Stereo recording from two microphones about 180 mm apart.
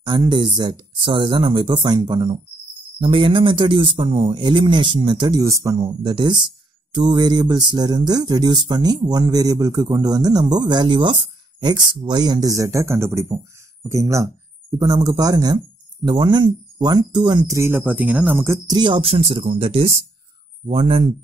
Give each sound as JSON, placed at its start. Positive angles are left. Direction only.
{"t": 0.0, "sound": "speech", "side_deg": -25}
{"t": 18.8, "sound": "speech", "side_deg": -30}